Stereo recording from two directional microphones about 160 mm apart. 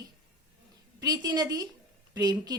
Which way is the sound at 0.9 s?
25° right (ahead or behind).